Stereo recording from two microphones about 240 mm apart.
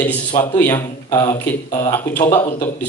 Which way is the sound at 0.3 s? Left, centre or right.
Centre.